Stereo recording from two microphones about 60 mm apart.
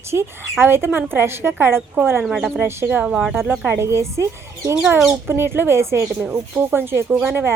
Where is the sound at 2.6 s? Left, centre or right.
Right.